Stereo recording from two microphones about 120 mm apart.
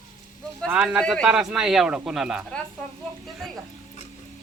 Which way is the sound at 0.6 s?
15° right (ahead or behind).